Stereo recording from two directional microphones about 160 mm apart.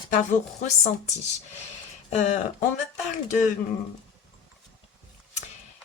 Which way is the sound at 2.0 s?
45° left (ahead or behind).